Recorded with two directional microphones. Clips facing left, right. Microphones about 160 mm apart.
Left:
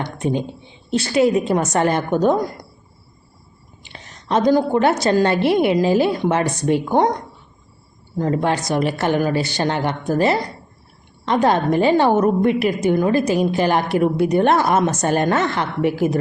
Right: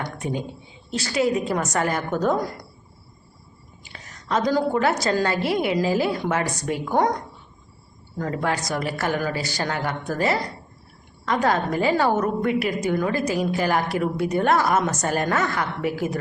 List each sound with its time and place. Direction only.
0.0 s a woman's voice: 25° left (ahead or behind)
3.9 s a woman's voice: 25° left (ahead or behind)
8.2 s a woman's voice: 25° left (ahead or behind)